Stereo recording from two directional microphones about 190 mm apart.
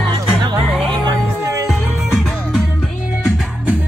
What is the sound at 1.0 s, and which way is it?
Music, 15° right (ahead or behind).